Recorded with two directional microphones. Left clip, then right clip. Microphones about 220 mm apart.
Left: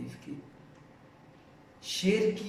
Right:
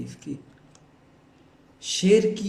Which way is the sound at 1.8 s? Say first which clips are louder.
Right 8 dB; 50° right (ahead or behind).